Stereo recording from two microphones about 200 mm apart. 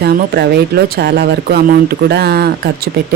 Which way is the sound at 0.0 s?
55° right (ahead or behind).